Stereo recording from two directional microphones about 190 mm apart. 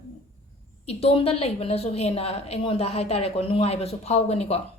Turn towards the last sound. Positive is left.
turn(degrees=35)  # may be behind; listen again after turning